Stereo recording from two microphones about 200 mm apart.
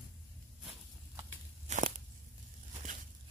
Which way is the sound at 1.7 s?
40° right (ahead or behind).